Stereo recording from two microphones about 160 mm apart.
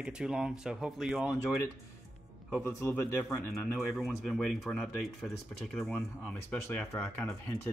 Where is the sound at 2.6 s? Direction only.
20° left (ahead or behind).